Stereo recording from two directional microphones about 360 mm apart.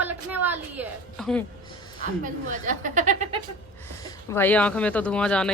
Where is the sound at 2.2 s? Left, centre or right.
Right.